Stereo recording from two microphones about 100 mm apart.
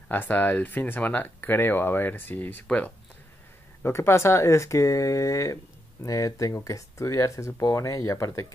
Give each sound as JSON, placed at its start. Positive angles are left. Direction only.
{"t": 0.1, "sound": "speech", "side_deg": 20}